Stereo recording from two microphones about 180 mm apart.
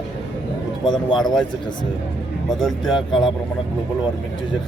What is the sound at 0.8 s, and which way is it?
Speech, 25° left (ahead or behind).